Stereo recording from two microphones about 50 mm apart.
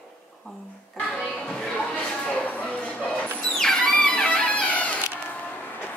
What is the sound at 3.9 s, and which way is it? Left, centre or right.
Speech, centre.